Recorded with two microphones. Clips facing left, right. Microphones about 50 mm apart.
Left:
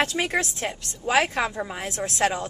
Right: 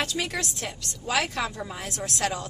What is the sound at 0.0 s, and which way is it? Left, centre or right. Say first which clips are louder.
Speech: left 5 dB; left.